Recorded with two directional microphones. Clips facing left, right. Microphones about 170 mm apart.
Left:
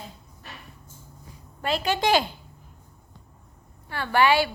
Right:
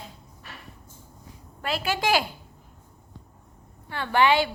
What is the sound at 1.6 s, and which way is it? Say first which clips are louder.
Speech: left 2 dB; 5° right (ahead or behind).